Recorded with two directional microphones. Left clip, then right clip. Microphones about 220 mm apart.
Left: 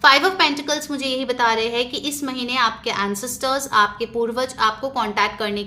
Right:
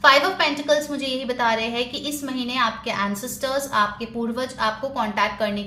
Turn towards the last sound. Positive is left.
turn(degrees=35)  # may be behind; listen again after turning